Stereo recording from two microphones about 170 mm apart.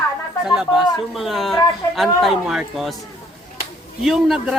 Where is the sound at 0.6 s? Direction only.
Centre (ahead or behind).